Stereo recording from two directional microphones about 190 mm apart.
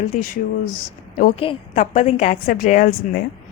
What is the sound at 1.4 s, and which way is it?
A woman's voice, 35° left (ahead or behind).